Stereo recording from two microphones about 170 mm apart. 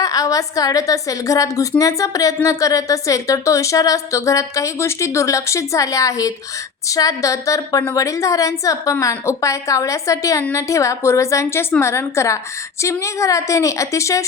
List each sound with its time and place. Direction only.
0.0 s a woman's voice: 20° left (ahead or behind)